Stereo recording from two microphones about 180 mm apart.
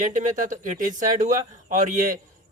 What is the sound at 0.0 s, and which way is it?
Speech, 45° right (ahead or behind).